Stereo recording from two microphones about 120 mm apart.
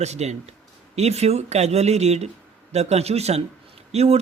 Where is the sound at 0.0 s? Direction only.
65° right (ahead or behind).